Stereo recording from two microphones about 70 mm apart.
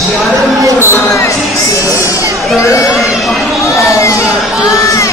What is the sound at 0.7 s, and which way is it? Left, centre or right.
Speech, left.